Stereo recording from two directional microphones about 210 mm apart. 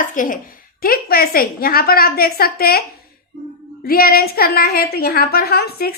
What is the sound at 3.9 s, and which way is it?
A woman's voice, 45° left (ahead or behind).